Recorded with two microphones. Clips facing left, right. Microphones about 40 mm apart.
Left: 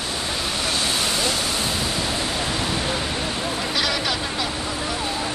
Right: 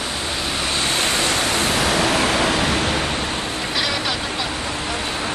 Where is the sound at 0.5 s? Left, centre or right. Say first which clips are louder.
Right 3 dB; right.